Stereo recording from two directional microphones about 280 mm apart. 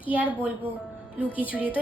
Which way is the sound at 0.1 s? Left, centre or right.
Centre.